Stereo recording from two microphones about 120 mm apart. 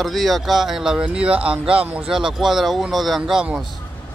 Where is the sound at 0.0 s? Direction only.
Centre (ahead or behind).